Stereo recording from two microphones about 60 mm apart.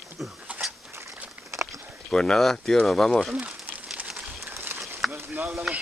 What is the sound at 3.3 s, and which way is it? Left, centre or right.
Crumpling, right.